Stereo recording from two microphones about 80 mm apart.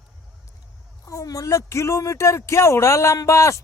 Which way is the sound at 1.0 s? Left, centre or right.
Left.